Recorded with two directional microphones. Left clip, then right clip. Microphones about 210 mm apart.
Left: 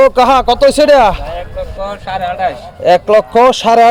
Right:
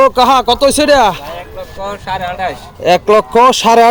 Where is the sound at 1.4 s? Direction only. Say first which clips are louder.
Left 3 dB; 20° right (ahead or behind).